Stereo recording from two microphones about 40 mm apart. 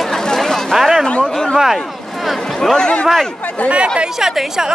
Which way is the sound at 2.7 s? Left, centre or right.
Left.